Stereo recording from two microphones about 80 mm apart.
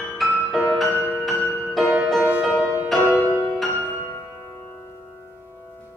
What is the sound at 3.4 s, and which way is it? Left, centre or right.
Music, centre.